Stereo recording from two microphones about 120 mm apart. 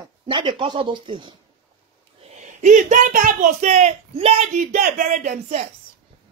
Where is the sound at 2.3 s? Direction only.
90° right.